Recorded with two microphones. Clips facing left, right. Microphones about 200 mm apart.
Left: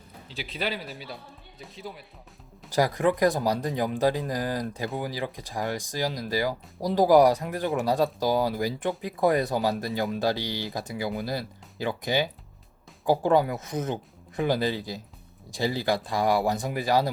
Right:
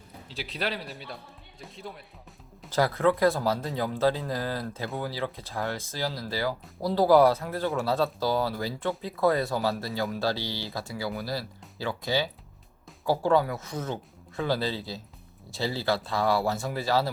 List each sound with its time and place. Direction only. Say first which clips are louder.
0.3 s speech: left 1 dB; centre (ahead or behind)
2.6 s speech: even; 15° left (ahead or behind)